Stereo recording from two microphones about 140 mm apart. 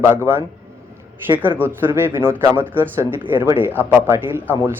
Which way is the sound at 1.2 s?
15° right (ahead or behind).